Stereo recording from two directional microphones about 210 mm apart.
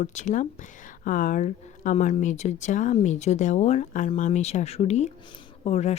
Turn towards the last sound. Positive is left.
turn(degrees=30)  # may be behind; listen again after turning